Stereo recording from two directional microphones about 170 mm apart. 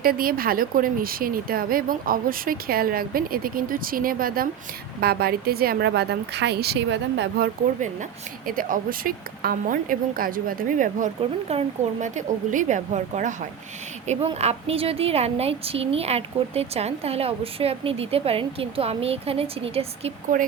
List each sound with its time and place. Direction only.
0.0 s a woman's voice: 60° right (ahead or behind); by 7.5 s 80° right
8.4 s a woman's voice: 55° right (ahead or behind); by 20.1 s 35° right (ahead or behind)